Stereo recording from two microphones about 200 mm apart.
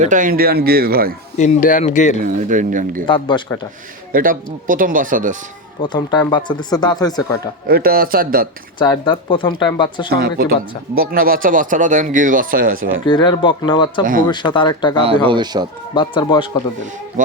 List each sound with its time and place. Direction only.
0.0 s speech: 40° right (ahead or behind)
1.4 s speech: 40° left (ahead or behind)
2.2 s speech: 40° right (ahead or behind)
3.1 s speech: 25° left (ahead or behind)
4.1 s speech: 45° right (ahead or behind)
5.8 s speech: 25° left (ahead or behind)
7.7 s speech: 50° right (ahead or behind)
8.8 s speech: 25° left (ahead or behind)
10.2 s speech: 50° right (ahead or behind)
13.1 s speech: 25° left (ahead or behind)
14.0 s speech: 40° right (ahead or behind)
14.3 s speech: 20° left (ahead or behind)
15.3 s speech: 20° right (ahead or behind)
16.0 s speech: 25° left (ahead or behind)